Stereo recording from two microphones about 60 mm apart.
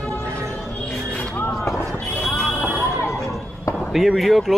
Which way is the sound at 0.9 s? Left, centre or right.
Centre.